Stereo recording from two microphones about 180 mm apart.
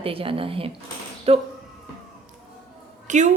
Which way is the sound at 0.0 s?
30° right (ahead or behind).